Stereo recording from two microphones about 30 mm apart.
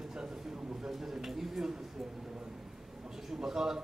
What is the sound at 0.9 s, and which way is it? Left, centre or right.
Speech, centre.